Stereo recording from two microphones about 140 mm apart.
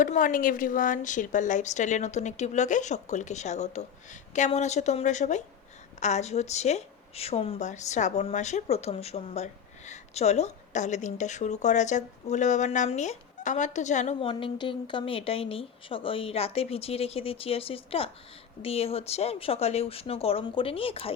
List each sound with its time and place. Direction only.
0.0 s a woman's voice: 70° left (ahead or behind); by 7.7 s 45° left (ahead or behind)
7.7 s a woman's voice: 55° left (ahead or behind)
14.2 s a woman's voice: 40° left (ahead or behind)